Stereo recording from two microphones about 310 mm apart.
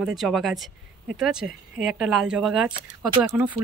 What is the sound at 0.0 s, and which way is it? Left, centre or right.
Speech, centre.